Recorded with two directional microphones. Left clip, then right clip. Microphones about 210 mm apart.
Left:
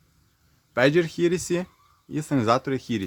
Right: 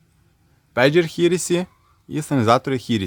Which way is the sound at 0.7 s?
20° right (ahead or behind).